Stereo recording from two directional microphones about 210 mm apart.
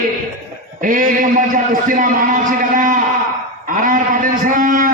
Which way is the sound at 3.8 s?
40° right (ahead or behind).